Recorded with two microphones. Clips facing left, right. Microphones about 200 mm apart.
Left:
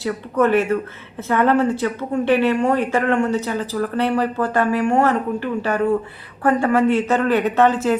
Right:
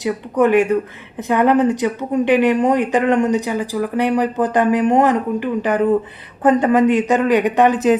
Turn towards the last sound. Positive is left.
turn(degrees=-15)  # may be behind; listen again after turning